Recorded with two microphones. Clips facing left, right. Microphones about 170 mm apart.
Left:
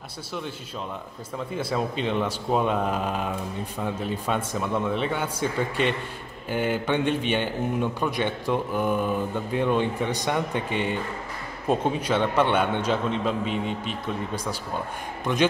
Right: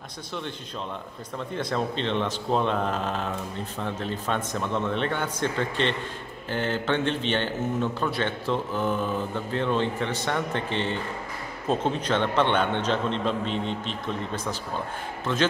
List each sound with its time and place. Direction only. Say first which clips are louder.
1.5 s a man's voice: even; 5° left (ahead or behind)